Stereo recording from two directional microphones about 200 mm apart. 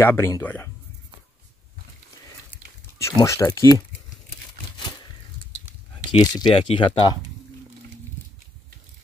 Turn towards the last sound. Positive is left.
turn(degrees=20)  # may be behind; listen again after turning